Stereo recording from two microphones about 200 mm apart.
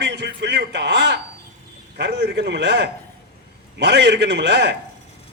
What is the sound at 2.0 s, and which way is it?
A man's voice, 55° right (ahead or behind).